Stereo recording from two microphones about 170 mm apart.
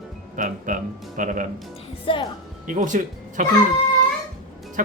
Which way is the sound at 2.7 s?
50° right (ahead or behind).